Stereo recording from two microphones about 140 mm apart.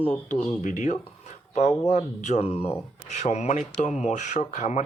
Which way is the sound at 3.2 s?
55° left (ahead or behind).